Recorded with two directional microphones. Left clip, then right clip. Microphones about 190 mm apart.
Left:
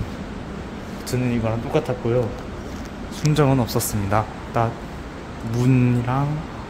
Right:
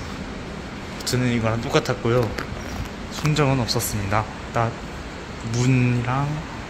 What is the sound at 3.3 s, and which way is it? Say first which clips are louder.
Speech: left 2 dB; 15° left (ahead or behind).